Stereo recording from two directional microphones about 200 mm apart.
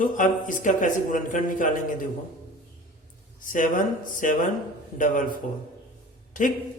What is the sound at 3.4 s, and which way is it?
A man's voice, 40° left (ahead or behind).